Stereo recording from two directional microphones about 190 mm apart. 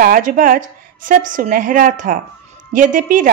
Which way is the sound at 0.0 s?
45° right (ahead or behind).